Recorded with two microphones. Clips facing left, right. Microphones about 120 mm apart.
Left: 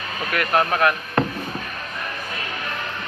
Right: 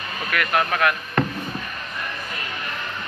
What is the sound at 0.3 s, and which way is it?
Speech, 40° left (ahead or behind).